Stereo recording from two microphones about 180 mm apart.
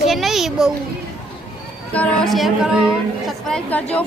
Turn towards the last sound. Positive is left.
turn(degrees=10)  # may be behind; listen again after turning